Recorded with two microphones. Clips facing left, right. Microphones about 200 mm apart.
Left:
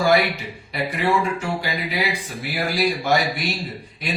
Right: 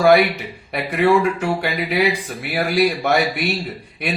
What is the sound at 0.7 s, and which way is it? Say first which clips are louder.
Speech: right 6 dB; 60° right (ahead or behind).